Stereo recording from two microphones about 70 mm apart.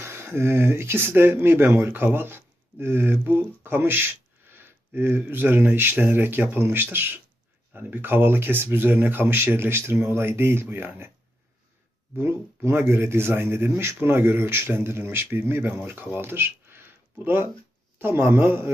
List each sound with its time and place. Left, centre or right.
0.0 s speech: right
12.1 s speech: right